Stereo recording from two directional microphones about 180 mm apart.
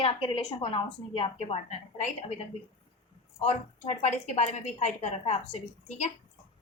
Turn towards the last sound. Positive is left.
turn(degrees=40)  # may be behind; listen again after turning